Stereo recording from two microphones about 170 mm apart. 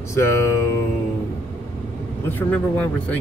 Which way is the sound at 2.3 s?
10° left (ahead or behind).